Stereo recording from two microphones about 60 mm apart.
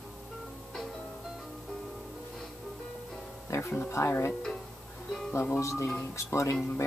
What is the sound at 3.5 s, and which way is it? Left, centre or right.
Music, left.